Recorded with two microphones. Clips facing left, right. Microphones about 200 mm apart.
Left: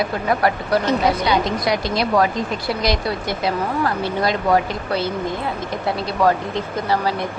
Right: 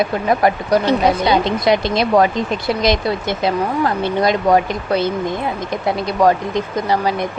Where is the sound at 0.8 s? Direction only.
30° right (ahead or behind).